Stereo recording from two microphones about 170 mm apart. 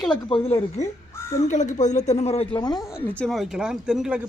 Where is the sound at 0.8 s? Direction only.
45° left (ahead or behind).